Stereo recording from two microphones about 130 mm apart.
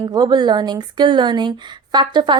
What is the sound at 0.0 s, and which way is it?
A woman's voice, 30° right (ahead or behind).